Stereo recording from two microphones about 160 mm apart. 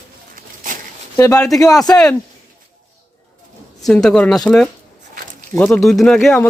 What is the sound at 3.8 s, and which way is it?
Speech, 5° left (ahead or behind).